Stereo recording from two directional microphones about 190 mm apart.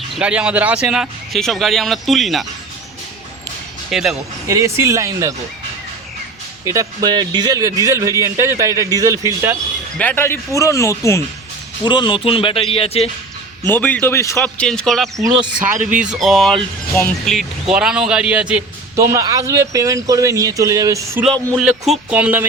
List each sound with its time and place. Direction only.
0.2 s speech: 5° right (ahead or behind)
3.8 s speech: centre (ahead or behind)
4.4 s a man's voice: 15° right (ahead or behind)
6.7 s a man's voice: 20° right (ahead or behind)
10.0 s speech: 10° left (ahead or behind); by 13.1 s 30° left (ahead or behind)
13.7 s speech: 10° left (ahead or behind)
14.3 s speech: 5° left (ahead or behind)
15.1 s speech: 20° right (ahead or behind)
16.0 s a man's voice: centre (ahead or behind)
21.5 s a man's voice: centre (ahead or behind)